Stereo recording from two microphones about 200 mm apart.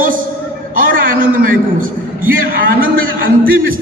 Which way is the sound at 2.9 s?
45° right (ahead or behind).